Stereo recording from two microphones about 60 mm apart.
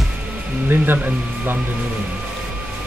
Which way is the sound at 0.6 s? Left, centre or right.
Right.